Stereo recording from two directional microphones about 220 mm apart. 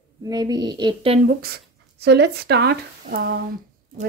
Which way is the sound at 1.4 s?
45° right (ahead or behind).